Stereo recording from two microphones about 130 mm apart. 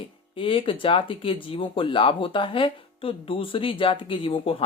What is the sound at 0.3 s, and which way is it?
Speech, 45° left (ahead or behind).